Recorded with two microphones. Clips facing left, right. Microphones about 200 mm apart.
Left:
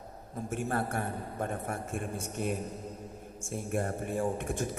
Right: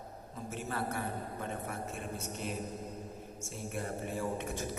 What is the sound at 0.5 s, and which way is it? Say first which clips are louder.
A man's voice: left 5 dB; 50° left (ahead or behind).